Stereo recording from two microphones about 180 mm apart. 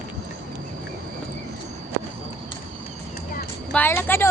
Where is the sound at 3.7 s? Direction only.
10° left (ahead or behind).